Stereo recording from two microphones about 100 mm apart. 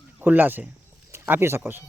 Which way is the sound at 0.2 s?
20° right (ahead or behind).